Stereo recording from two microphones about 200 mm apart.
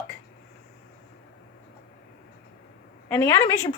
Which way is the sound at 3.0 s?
10° left (ahead or behind).